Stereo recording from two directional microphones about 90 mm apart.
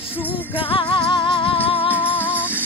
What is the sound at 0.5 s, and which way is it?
Music, 90° left.